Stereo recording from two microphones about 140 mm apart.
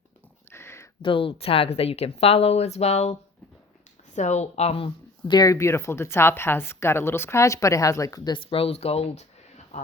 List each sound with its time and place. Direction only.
0.5 s a sound: 20° left (ahead or behind)
1.0 s a woman's voice: 40° left (ahead or behind)
5.3 s a woman's voice: 25° left (ahead or behind); by 9.9 s 55° left (ahead or behind)